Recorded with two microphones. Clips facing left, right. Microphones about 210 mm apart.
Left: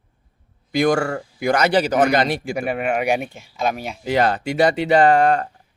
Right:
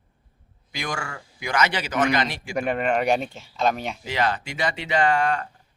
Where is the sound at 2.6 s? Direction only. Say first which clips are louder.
Right 2 dB; 5° left (ahead or behind).